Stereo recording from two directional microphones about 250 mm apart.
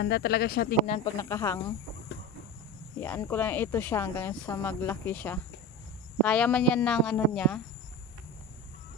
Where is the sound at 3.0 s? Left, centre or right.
Centre.